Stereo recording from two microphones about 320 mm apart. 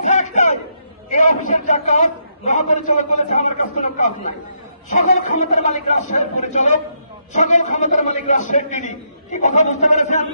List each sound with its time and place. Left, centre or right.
0.0 s chatter: left
1.1 s a man's voice: left
5.4 s a man's voice: left